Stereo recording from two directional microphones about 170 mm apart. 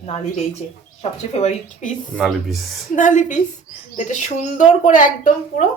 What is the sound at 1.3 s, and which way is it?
Speech, 40° left (ahead or behind).